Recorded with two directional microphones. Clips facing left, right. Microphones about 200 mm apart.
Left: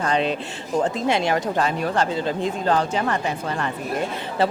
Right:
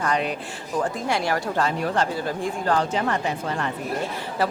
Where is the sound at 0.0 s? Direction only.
25° left (ahead or behind).